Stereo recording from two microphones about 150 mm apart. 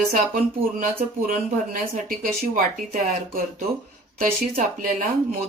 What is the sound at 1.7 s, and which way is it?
Speech, 65° right (ahead or behind).